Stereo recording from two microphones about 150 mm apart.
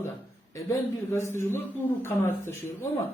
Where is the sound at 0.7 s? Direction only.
15° left (ahead or behind).